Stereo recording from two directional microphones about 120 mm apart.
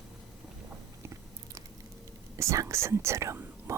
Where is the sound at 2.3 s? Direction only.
25° right (ahead or behind).